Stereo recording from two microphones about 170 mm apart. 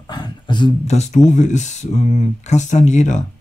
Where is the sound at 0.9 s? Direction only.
40° left (ahead or behind).